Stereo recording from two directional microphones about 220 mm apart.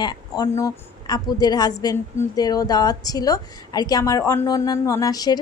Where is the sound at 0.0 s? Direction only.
20° left (ahead or behind).